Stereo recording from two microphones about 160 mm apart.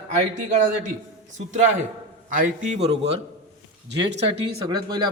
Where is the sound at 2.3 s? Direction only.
50° right (ahead or behind).